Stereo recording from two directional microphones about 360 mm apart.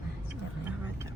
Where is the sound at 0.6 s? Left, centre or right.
Centre.